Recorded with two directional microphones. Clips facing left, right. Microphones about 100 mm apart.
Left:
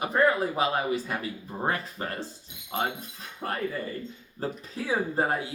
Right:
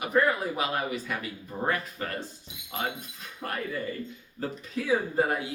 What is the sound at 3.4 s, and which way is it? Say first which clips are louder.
Speech: left 1 dB; 25° left (ahead or behind).